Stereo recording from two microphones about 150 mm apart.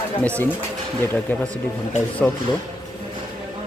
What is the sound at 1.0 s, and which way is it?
Speech, 10° left (ahead or behind).